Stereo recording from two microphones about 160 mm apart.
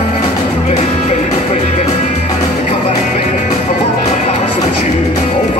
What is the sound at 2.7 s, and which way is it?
Music, 40° left (ahead or behind).